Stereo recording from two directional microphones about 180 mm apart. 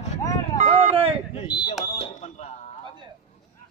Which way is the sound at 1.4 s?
25° left (ahead or behind).